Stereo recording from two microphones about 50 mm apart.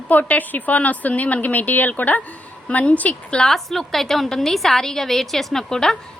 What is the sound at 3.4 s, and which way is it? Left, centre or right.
A woman's voice, centre.